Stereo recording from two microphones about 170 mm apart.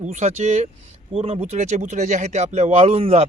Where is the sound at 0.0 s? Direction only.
45° right (ahead or behind).